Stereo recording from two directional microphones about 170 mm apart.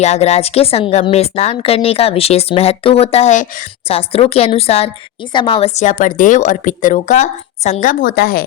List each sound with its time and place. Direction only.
0.0 s a woman's voice: 40° left (ahead or behind); by 8.4 s 65° left (ahead or behind)